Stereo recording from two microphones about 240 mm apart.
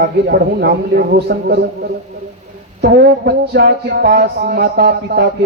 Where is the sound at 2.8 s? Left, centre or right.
Right.